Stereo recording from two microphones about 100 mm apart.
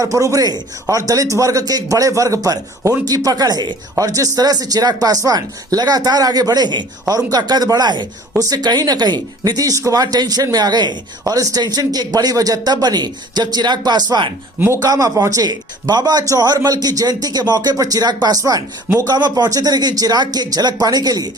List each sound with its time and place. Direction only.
0.0 s speech: 35° right (ahead or behind); by 14.3 s 50° right (ahead or behind)
14.8 s speech: 35° right (ahead or behind)